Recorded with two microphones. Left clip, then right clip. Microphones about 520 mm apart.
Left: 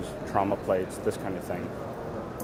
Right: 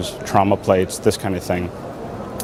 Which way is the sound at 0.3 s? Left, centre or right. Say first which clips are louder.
Right 10 dB; right.